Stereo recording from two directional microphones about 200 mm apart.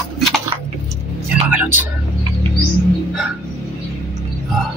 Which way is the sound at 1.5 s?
10° right (ahead or behind).